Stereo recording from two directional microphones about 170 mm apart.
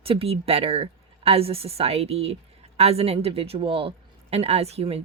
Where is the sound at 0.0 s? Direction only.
35° right (ahead or behind).